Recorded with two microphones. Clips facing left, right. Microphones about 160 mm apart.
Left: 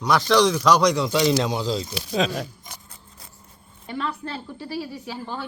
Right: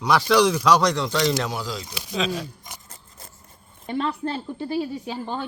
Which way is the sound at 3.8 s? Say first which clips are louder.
Right 4 dB; 25° right (ahead or behind).